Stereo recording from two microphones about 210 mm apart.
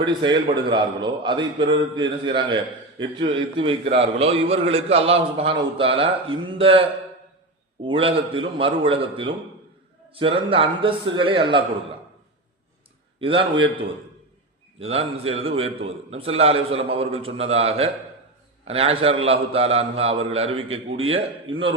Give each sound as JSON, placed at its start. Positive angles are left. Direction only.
{"t": 0.0, "sound": "a man's voice", "side_deg": -20}
{"t": 13.1, "sound": "a man's voice", "side_deg": -25}